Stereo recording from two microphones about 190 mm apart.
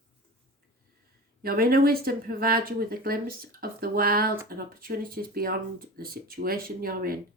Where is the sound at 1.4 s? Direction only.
50° right (ahead or behind).